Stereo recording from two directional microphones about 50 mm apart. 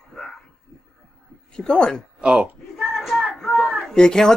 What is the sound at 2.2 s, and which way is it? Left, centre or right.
Speech, centre.